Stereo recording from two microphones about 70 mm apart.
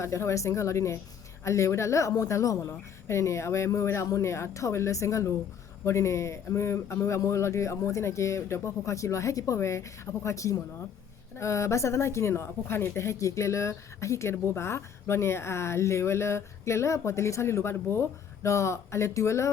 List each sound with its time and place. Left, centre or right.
0.0 s a woman's voice: left
13.0 s speech: left